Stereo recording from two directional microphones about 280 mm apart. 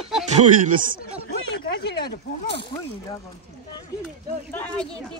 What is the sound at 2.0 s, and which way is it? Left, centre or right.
Speech, left.